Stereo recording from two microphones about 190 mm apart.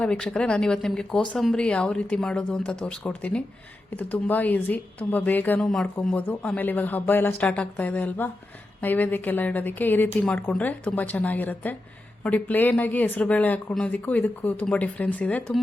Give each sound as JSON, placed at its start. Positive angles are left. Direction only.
{"t": 0.0, "sound": "speech", "side_deg": 5}